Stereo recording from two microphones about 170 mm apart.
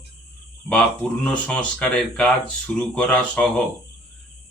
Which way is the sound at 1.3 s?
5° left (ahead or behind).